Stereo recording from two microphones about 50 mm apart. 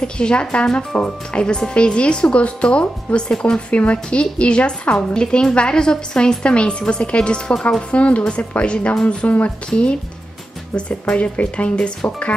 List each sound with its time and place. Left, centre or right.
0.0 s speech: centre